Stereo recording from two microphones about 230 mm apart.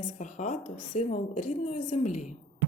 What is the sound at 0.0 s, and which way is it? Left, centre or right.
A woman's voice, left.